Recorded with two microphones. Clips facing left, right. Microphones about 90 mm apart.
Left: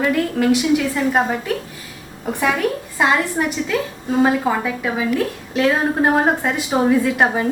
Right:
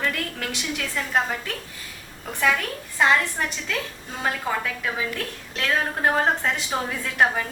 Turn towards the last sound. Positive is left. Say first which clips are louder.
# left 5 dB
turn(degrees=20)  # may be behind; listen again after turning